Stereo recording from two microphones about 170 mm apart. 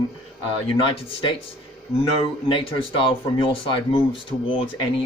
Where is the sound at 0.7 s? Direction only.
30° left (ahead or behind).